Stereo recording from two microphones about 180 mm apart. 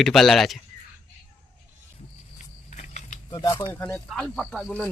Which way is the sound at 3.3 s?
25° left (ahead or behind).